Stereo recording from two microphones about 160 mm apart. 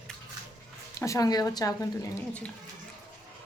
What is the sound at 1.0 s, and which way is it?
Speech, 20° left (ahead or behind).